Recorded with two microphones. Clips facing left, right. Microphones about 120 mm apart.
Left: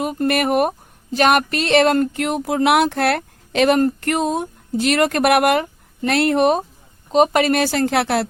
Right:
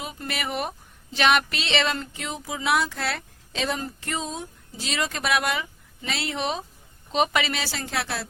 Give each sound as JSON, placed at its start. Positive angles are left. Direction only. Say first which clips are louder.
{"t": 0.0, "sound": "speech", "louder": "left 13 dB", "side_deg": 55}